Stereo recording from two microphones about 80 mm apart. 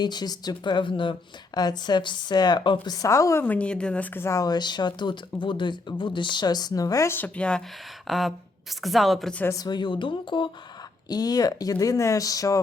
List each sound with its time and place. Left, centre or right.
0.0 s speech: left
1.5 s speech: left
2.8 s a woman's voice: left
3.4 s a woman's voice: centre
4.1 s speech: left
4.4 s speech: left
7.3 s a woman's voice: centre
8.0 s a sound: centre
8.8 s a woman's voice: centre
9.6 s speech: left
11.1 s speech: left